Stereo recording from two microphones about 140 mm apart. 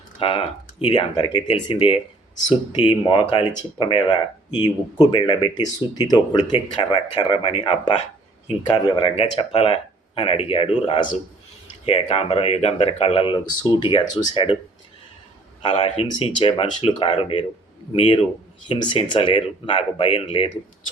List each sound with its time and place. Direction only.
0.2 s speech: 40° left (ahead or behind)
9.4 s speech: 45° left (ahead or behind); by 14.4 s 30° left (ahead or behind)
15.6 s speech: 40° left (ahead or behind)